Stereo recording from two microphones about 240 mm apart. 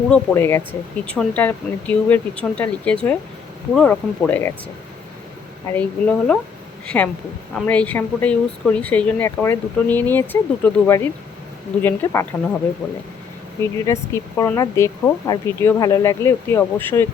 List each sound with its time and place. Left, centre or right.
0.1 s speech: centre
5.7 s speech: centre
13.6 s speech: centre